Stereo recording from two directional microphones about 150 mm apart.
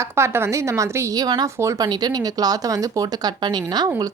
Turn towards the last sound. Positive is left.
turn(degrees=-25)  # may be behind; listen again after turning